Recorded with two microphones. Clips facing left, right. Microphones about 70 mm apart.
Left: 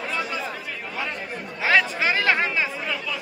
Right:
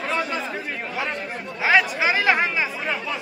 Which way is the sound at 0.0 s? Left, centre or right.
Right.